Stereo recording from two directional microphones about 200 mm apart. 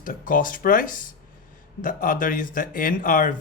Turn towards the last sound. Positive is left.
turn(degrees=45)  # may be behind; listen again after turning